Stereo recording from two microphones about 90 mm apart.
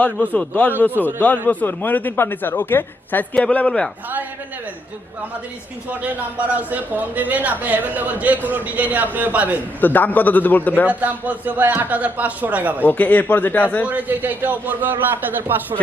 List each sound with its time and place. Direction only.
0.3 s speech: 15° left (ahead or behind)
0.9 s a man's voice: 20° right (ahead or behind)
1.5 s a woman's voice: 20° left (ahead or behind)
5.9 s a man's voice: 15° right (ahead or behind)
9.8 s a woman's voice: 20° left (ahead or behind)
10.8 s a man's voice: 20° right (ahead or behind)
12.8 s a woman's voice: 20° left (ahead or behind)
13.8 s a man's voice: 20° right (ahead or behind)